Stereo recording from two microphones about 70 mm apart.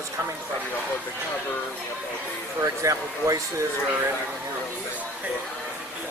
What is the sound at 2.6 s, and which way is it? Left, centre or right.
Speech, right.